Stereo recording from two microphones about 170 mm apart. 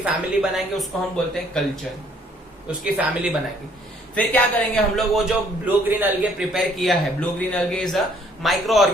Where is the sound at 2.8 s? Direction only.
5° right (ahead or behind).